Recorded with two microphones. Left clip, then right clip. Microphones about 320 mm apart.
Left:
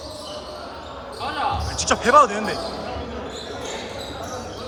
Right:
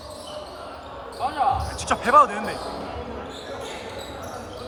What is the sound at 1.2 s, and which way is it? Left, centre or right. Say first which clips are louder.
Basketball bounce: right 1 dB; centre.